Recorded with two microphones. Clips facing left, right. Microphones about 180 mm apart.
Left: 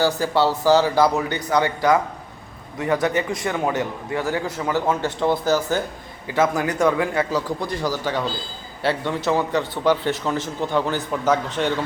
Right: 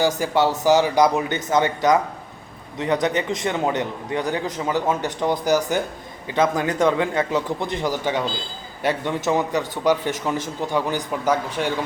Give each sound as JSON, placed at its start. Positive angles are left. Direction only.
{"t": 0.0, "sound": "a man's voice", "side_deg": -15}